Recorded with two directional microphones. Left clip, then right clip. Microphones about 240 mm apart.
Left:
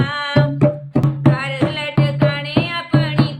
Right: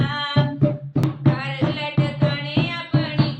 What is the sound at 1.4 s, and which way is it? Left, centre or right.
Music, left.